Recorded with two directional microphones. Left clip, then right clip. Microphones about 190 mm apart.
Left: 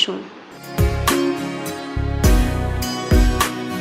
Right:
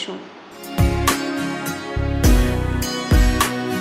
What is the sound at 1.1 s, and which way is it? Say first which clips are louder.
Music: left 2 dB; centre (ahead or behind).